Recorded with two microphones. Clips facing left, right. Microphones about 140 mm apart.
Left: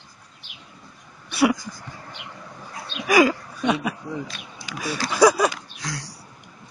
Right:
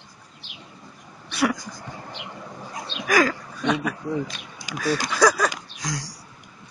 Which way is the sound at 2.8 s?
10° left (ahead or behind).